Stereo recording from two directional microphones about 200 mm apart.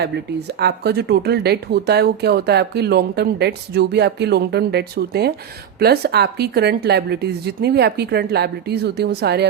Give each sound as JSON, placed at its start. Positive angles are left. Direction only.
{"t": 0.0, "sound": "speech", "side_deg": -55}